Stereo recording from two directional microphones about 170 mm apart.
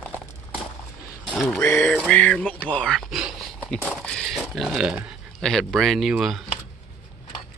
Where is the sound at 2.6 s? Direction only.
5° left (ahead or behind).